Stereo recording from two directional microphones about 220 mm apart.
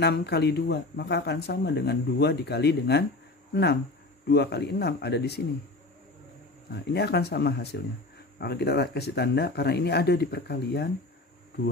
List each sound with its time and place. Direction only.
0.0 s speech: 50° left (ahead or behind)
4.3 s speech: 50° left (ahead or behind)
6.7 s speech: 50° left (ahead or behind)